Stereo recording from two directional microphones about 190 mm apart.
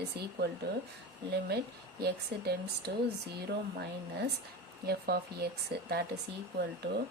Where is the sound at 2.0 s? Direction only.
60° right (ahead or behind).